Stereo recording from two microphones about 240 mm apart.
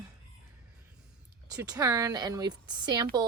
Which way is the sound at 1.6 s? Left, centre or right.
Centre.